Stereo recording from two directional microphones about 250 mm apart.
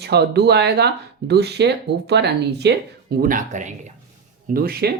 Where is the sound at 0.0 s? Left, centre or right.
Right.